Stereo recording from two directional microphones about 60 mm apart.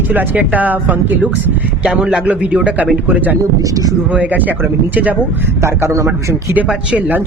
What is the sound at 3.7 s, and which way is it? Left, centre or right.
Speech, right.